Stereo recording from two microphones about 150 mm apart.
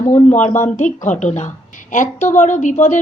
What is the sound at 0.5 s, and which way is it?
A woman's voice, 60° left (ahead or behind).